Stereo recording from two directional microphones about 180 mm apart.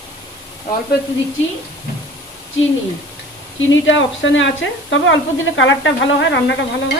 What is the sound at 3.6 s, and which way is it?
Speech, 90° left.